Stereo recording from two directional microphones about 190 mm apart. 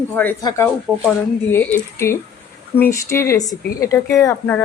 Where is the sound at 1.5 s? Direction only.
10° left (ahead or behind).